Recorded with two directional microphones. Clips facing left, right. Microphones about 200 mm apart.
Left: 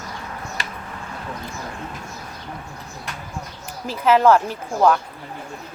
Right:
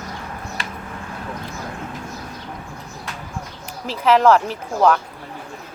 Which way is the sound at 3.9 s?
5° left (ahead or behind).